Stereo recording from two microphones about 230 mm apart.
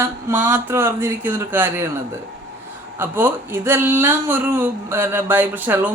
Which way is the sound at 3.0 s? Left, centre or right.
Centre.